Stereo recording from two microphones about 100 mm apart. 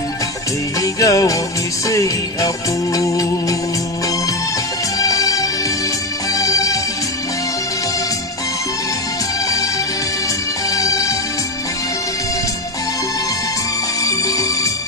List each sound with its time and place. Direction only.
0.8 s music: 35° left (ahead or behind)
4.9 s music: 35° left (ahead or behind)
10.7 s music: 35° left (ahead or behind)
14.0 s music: 35° left (ahead or behind)